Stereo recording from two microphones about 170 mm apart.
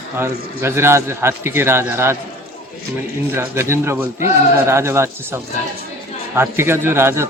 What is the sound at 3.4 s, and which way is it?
A man's voice, 15° right (ahead or behind).